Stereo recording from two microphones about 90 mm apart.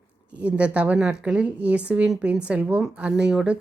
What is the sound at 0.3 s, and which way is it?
Speech, 15° right (ahead or behind).